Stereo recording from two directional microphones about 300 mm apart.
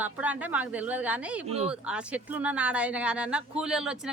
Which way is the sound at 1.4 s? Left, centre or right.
Centre.